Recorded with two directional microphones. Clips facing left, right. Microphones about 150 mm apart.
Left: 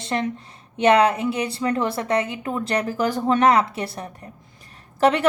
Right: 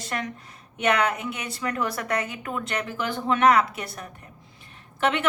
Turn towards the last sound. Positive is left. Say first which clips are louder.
# left 6 dB
turn(degrees=35)  # may be behind; listen again after turning